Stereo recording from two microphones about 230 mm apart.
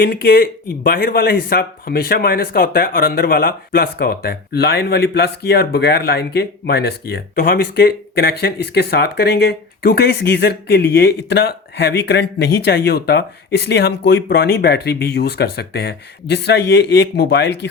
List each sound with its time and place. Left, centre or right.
0.0 s speech: left